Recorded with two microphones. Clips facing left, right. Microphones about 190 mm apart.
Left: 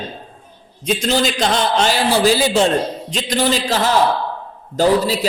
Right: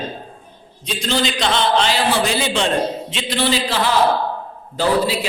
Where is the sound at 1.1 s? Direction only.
45° left (ahead or behind).